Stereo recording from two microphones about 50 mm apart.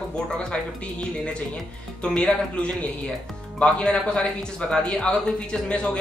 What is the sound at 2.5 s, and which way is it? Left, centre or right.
Speech, left.